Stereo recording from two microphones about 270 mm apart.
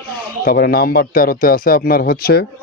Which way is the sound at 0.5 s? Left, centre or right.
Left.